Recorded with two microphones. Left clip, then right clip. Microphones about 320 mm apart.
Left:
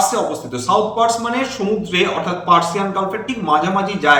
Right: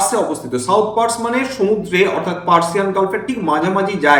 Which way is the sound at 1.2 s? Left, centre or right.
Centre.